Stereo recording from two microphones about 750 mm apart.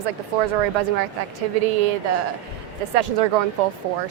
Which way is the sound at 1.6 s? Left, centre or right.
Right.